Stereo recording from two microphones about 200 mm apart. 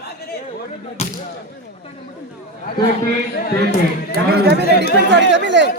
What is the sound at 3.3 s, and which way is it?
Speech, 50° left (ahead or behind).